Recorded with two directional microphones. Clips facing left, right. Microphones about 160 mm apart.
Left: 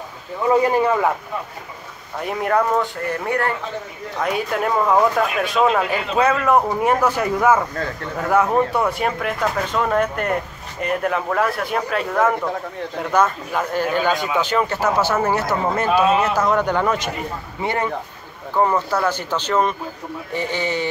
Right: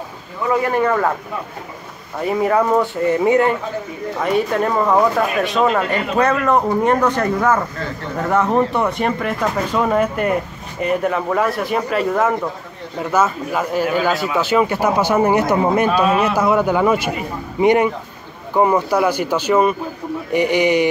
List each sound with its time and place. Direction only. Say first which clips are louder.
0.5 s speech: left 1 dB; 20° left (ahead or behind)
2.1 s speech: right 3 dB; centre (ahead or behind); by 3.5 s 15° right (ahead or behind)
4.2 s speech: right 4 dB; centre (ahead or behind); by 20.9 s 15° right (ahead or behind)